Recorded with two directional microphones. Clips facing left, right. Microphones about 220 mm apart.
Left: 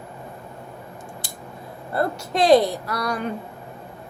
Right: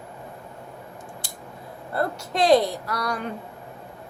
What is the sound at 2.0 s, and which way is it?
A woman's voice, 5° left (ahead or behind).